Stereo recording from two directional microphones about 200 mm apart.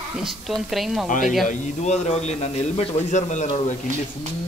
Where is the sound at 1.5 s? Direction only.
35° left (ahead or behind).